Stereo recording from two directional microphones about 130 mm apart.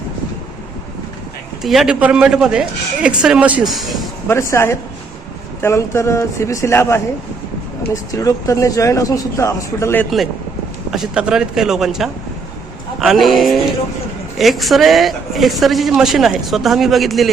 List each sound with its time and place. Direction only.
1.6 s speech: centre (ahead or behind)
4.3 s speech: 20° left (ahead or behind)
8.1 s speech: 25° left (ahead or behind)
10.9 s speech: 5° right (ahead or behind)